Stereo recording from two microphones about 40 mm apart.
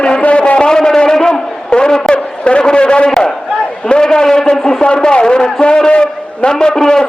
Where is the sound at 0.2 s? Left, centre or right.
Left.